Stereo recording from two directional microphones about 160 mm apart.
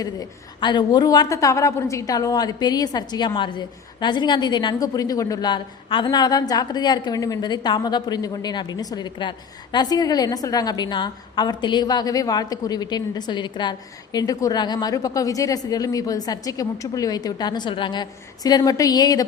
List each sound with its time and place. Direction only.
0.0 s a woman's voice: 25° left (ahead or behind)